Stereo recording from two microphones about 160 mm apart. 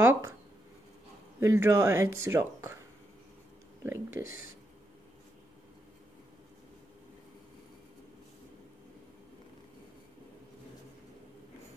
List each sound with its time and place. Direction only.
0.0 s a sound: 15° right (ahead or behind)
1.4 s speech: 15° right (ahead or behind)
3.8 s speech: 15° right (ahead or behind)